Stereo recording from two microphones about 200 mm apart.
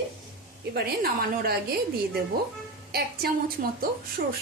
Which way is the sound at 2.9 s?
50° right (ahead or behind).